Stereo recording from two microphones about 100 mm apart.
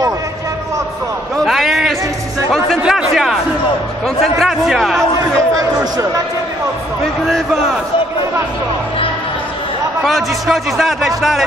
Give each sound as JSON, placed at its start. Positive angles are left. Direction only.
{"t": 1.4, "sound": "a sound", "side_deg": 0}
{"t": 4.4, "sound": "a man's voice", "side_deg": 0}
{"t": 5.6, "sound": "speech", "side_deg": -35}
{"t": 7.2, "sound": "a man's voice", "side_deg": -5}
{"t": 10.0, "sound": "a man's voice", "side_deg": 0}